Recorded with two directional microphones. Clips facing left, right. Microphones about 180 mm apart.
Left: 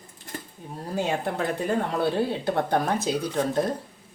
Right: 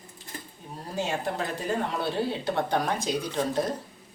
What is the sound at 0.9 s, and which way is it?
Speech, 55° left (ahead or behind).